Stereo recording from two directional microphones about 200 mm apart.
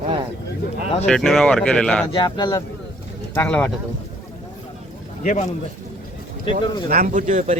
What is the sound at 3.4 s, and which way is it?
Speech, 5° left (ahead or behind).